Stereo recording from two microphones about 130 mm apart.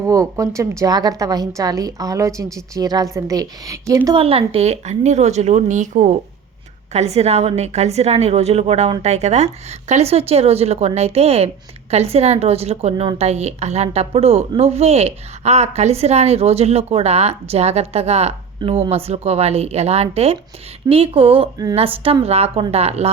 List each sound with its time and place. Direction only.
0.0 s a woman's voice: 25° right (ahead or behind)
4.1 s a woman's voice: 45° right (ahead or behind); by 6.1 s 65° right (ahead or behind)
6.9 s a woman's voice: 55° right (ahead or behind)